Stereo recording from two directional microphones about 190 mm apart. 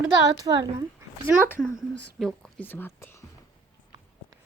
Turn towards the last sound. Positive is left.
turn(degrees=10)  # may be behind; listen again after turning